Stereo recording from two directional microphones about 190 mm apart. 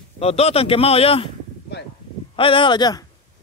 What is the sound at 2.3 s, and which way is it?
Speech, 25° left (ahead or behind).